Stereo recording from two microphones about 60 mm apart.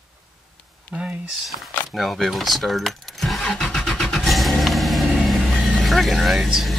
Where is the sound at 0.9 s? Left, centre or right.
Centre.